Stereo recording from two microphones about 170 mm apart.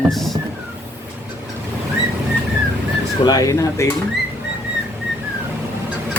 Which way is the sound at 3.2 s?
25° left (ahead or behind).